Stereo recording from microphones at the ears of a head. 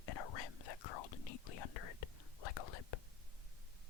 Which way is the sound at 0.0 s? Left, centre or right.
Left.